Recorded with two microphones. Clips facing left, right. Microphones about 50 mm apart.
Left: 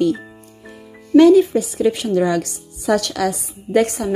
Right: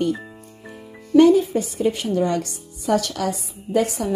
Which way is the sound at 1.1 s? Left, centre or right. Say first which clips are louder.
Left 4 dB; left.